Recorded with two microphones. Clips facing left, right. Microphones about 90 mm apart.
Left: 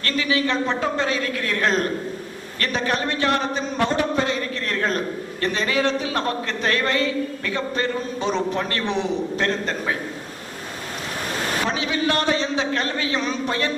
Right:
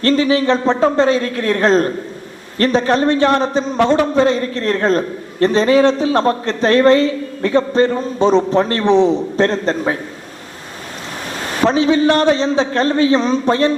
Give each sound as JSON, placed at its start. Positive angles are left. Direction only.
{"t": 0.0, "sound": "a man's voice", "side_deg": -35}
{"t": 11.6, "sound": "a man's voice", "side_deg": -35}